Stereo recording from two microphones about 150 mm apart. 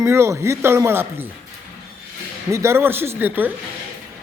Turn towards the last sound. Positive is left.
turn(degrees=-10)  # may be behind; listen again after turning